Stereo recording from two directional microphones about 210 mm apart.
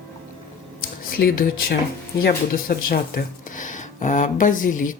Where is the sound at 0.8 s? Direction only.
45° left (ahead or behind).